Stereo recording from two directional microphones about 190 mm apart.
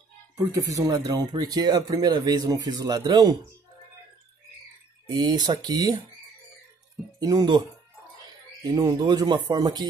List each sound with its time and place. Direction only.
0.4 s speech: 15° right (ahead or behind)
5.2 s speech: 20° right (ahead or behind)
7.2 s speech: 20° right (ahead or behind)
8.7 s speech: 20° right (ahead or behind)